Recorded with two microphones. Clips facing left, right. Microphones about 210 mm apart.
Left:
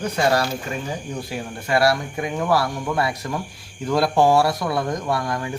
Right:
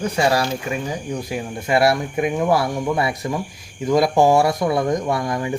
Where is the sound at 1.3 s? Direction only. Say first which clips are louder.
Right 2 dB; 20° right (ahead or behind).